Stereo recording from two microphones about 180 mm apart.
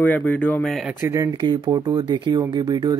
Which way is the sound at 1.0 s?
15° right (ahead or behind).